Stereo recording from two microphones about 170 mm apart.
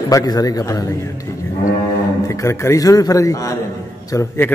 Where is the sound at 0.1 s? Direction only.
20° left (ahead or behind).